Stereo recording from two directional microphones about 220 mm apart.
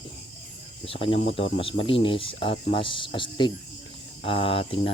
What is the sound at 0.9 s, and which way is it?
Speech, 25° left (ahead or behind).